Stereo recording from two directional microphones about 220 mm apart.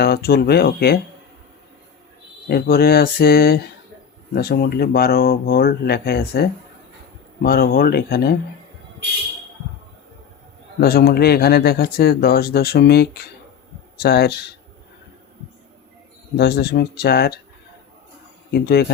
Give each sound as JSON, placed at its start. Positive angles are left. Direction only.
{"t": 0.0, "sound": "speech", "side_deg": 45}
{"t": 2.5, "sound": "speech", "side_deg": 45}
{"t": 10.8, "sound": "speech", "side_deg": 45}
{"t": 16.4, "sound": "speech", "side_deg": 50}
{"t": 18.5, "sound": "speech", "side_deg": 45}